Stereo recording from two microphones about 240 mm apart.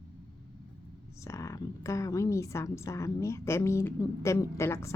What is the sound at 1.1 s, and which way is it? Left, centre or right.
A woman's voice, centre.